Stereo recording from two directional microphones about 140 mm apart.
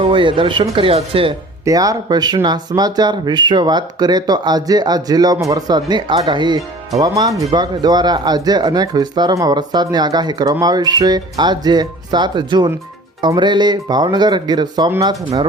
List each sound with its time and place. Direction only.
0.0 s speech: 35° right (ahead or behind)
1.6 s speech: 25° right (ahead or behind)